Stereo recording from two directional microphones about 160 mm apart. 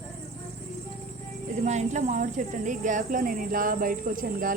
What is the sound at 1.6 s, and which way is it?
Speech, 45° right (ahead or behind).